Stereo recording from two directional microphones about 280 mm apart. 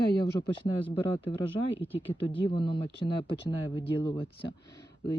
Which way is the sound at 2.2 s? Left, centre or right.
Centre.